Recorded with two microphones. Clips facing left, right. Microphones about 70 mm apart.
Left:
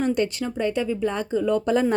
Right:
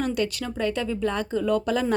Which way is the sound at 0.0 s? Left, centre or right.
Left.